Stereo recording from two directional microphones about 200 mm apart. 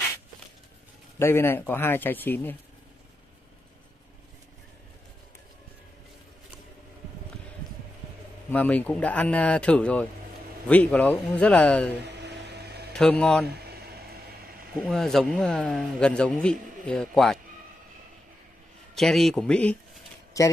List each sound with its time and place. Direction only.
1.2 s a man's voice: 10° left (ahead or behind)
8.5 s a man's voice: 10° left (ahead or behind)
12.1 s a sound: 55° right (ahead or behind)
12.9 s a man's voice: 5° left (ahead or behind)
13.5 s a sound: 50° right (ahead or behind)
14.9 s a man's voice: centre (ahead or behind)
18.9 s a man's voice: centre (ahead or behind)
20.4 s speech: 15° left (ahead or behind)